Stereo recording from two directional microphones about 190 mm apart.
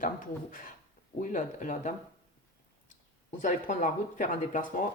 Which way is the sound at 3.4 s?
45° left (ahead or behind).